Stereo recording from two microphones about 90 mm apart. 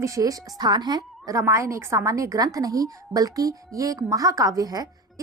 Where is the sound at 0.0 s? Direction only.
35° right (ahead or behind).